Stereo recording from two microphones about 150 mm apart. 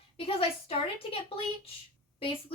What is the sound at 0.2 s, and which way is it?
A woman's voice, 40° left (ahead or behind).